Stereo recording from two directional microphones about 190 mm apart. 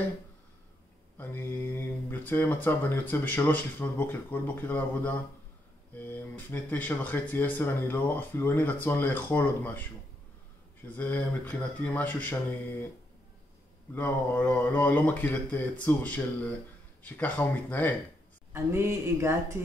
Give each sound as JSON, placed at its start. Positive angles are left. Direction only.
{"t": 1.1, "sound": "speech", "side_deg": 10}
{"t": 11.0, "sound": "speech", "side_deg": 10}
{"t": 13.9, "sound": "speech", "side_deg": 10}
{"t": 18.5, "sound": "speech", "side_deg": -15}